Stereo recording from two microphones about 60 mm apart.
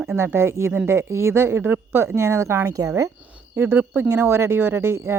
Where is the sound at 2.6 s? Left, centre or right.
Right.